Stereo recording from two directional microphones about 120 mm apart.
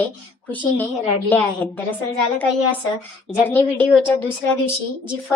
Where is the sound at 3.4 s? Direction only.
15° left (ahead or behind).